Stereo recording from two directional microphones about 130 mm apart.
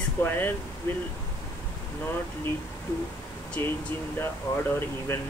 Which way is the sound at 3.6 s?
20° left (ahead or behind).